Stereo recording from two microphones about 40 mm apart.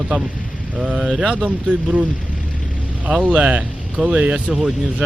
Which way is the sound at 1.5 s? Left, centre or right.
Right.